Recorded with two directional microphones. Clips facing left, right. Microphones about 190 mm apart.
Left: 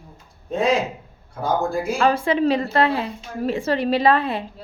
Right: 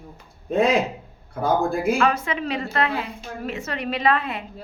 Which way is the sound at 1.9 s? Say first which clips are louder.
Left 3 dB; 30° left (ahead or behind).